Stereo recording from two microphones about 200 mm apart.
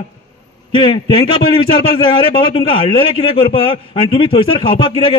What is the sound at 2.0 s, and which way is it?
A man's voice, 25° left (ahead or behind).